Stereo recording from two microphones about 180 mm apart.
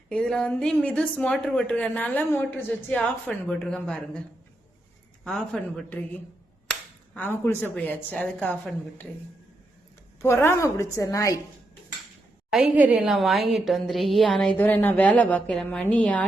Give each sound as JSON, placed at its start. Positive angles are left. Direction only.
{"t": 0.1, "sound": "a woman's voice", "side_deg": 5}
{"t": 5.2, "sound": "speech", "side_deg": 5}
{"t": 10.2, "sound": "speech", "side_deg": 15}
{"t": 12.5, "sound": "a woman's voice", "side_deg": -5}